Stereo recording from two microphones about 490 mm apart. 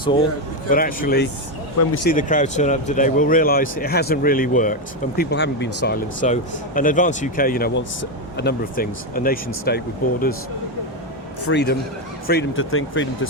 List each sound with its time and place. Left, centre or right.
0.7 s speech: centre
11.4 s speech: left